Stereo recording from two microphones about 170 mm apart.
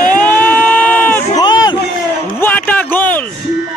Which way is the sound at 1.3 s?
25° left (ahead or behind).